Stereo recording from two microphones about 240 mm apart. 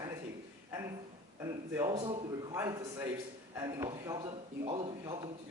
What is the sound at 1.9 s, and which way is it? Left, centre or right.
Speech, right.